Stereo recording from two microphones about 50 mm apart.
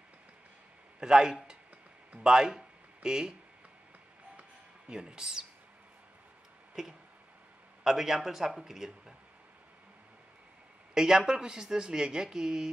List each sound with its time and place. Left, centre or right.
0.9 s a man's voice: centre
4.8 s speech: centre
6.7 s a sound: centre
7.8 s speech: centre
11.0 s speech: centre